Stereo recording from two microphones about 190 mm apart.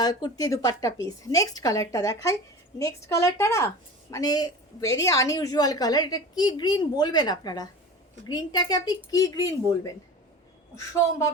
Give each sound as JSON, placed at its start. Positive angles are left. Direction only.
{"t": 0.0, "sound": "a woman's voice", "side_deg": 20}